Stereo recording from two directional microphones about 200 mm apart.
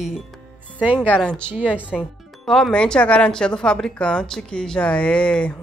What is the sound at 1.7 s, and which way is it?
Speech, 5° right (ahead or behind).